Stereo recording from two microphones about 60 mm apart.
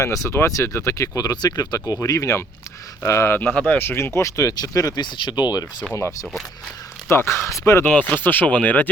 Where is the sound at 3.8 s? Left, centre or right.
Left.